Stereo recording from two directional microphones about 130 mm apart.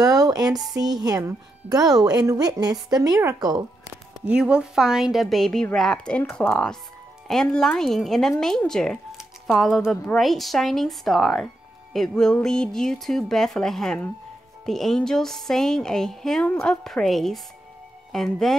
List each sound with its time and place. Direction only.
0.0 s speech: 25° right (ahead or behind)
4.3 s speech: 10° right (ahead or behind)